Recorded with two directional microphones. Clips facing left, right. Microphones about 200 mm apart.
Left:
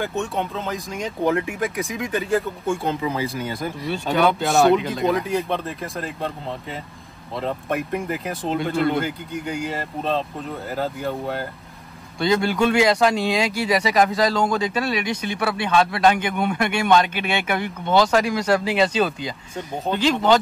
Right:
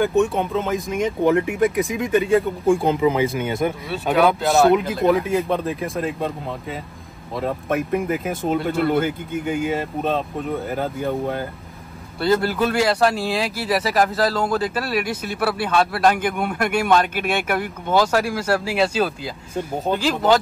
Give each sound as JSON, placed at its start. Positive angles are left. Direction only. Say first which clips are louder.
{"t": 0.3, "sound": "speech", "louder": "right 4 dB", "side_deg": 0}
{"t": 3.0, "sound": "speech", "louder": "right 6 dB", "side_deg": -20}
{"t": 3.8, "sound": "speech", "louder": "even", "side_deg": -5}
{"t": 7.3, "sound": "speech", "louder": "right 2 dB", "side_deg": 0}